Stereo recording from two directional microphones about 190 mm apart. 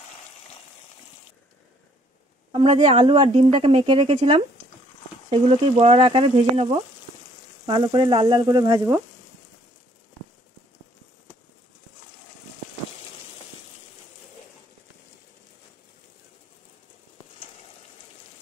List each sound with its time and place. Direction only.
2.5 s frying: 30° right (ahead or behind)
5.3 s speech: 30° right (ahead or behind)
7.6 s frying: 25° right (ahead or behind)